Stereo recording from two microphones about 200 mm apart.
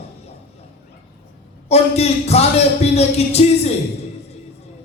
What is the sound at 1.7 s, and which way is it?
Speech, 30° left (ahead or behind).